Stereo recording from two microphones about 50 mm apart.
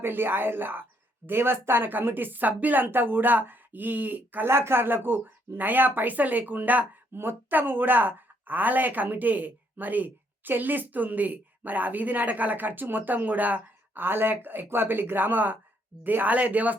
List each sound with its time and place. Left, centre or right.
0.0 s a woman's voice: right
4.4 s a woman's voice: right
7.1 s a woman's voice: right
14.0 s a woman's voice: right